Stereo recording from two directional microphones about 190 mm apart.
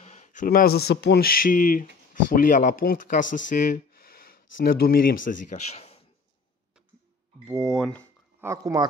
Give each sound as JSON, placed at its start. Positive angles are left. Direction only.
{"t": 0.0, "sound": "a sound", "side_deg": 35}
{"t": 0.5, "sound": "speech", "side_deg": 55}
{"t": 7.4, "sound": "speech", "side_deg": 0}
{"t": 8.4, "sound": "speech", "side_deg": -15}